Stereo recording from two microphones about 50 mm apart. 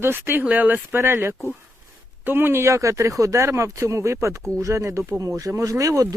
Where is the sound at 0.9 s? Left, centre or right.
Right.